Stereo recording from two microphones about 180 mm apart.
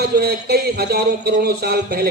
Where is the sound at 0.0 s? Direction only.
60° right (ahead or behind).